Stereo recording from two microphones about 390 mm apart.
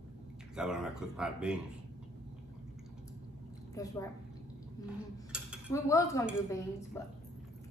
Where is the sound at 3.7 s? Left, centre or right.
Centre.